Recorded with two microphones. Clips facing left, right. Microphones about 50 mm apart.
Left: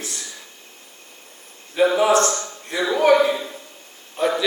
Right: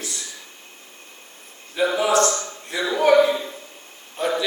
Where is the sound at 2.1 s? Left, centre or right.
Left.